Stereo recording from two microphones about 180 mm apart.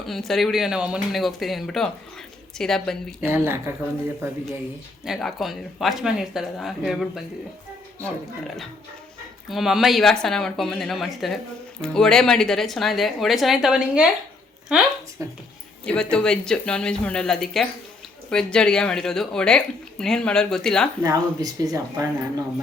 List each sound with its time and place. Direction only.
0.0 s speech: centre (ahead or behind)
3.2 s speech: 15° right (ahead or behind)
5.0 s speech: centre (ahead or behind)
15.2 s speech: 15° right (ahead or behind)
15.8 s speech: 5° left (ahead or behind)
21.0 s speech: 20° right (ahead or behind)